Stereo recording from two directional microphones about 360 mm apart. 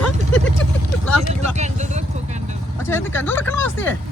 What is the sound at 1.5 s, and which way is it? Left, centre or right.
Vehicle, centre.